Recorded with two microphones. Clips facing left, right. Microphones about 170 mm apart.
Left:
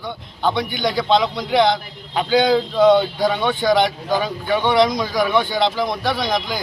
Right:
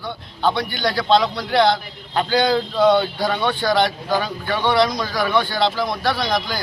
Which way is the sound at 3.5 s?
20° left (ahead or behind).